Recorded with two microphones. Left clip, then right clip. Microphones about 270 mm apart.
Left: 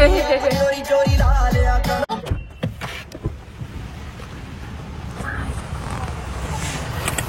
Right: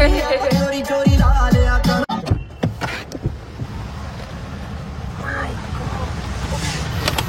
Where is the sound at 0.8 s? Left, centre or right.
Right.